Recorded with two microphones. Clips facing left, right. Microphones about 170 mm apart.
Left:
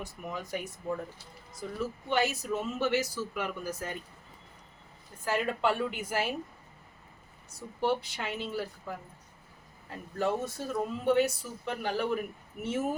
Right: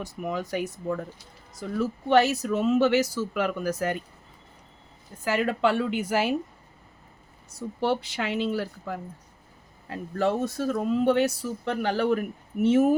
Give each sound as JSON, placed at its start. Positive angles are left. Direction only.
{"t": 0.0, "sound": "speech", "side_deg": -80}
{"t": 5.2, "sound": "speech", "side_deg": -80}
{"t": 7.8, "sound": "speech", "side_deg": -80}